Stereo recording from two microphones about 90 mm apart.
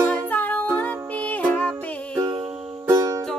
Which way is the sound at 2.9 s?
35° right (ahead or behind).